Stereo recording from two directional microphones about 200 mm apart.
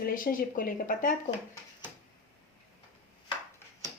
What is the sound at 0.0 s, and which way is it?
A woman's voice, 45° left (ahead or behind).